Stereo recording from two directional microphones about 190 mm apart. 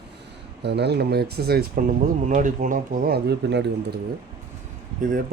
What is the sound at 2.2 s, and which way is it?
Speech, 40° right (ahead or behind).